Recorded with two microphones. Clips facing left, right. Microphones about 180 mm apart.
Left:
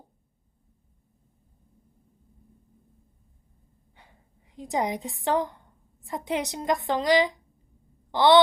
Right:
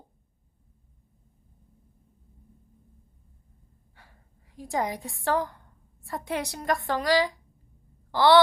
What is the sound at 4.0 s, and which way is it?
A woman's voice, 20° left (ahead or behind).